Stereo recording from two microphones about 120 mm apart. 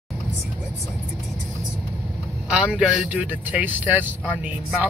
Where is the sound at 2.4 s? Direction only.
10° right (ahead or behind).